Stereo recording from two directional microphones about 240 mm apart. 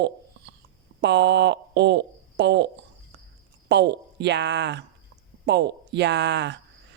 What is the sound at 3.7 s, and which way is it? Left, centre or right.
Speech, right.